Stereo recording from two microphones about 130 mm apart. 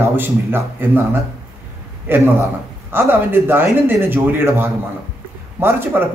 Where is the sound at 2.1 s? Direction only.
15° right (ahead or behind).